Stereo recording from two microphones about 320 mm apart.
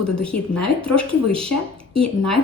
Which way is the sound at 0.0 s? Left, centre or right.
Centre.